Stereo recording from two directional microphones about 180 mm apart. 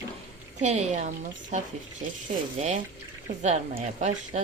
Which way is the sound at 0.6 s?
40° right (ahead or behind).